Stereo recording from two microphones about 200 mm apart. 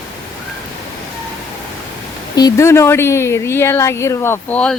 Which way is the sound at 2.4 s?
15° left (ahead or behind).